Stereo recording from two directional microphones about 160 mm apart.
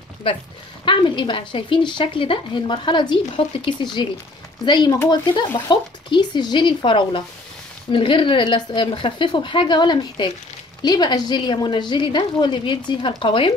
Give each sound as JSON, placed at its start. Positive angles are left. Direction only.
{"t": 0.8, "sound": "a woman's voice", "side_deg": 30}